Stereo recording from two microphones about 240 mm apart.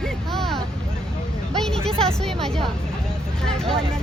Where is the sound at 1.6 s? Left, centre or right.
Centre.